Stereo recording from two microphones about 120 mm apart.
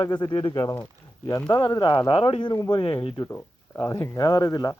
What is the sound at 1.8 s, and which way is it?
Speech, 40° left (ahead or behind).